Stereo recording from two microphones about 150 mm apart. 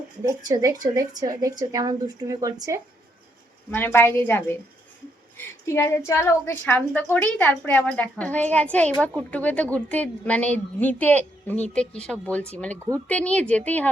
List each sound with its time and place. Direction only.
0.4 s speech: 25° right (ahead or behind)
3.7 s a woman's voice: 15° left (ahead or behind)
5.6 s a woman's voice: 15° left (ahead or behind)